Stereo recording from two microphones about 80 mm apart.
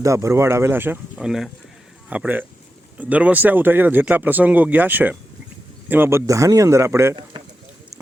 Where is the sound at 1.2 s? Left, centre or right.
Centre.